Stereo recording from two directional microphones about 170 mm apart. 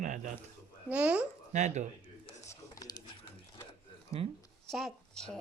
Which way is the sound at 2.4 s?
20° left (ahead or behind).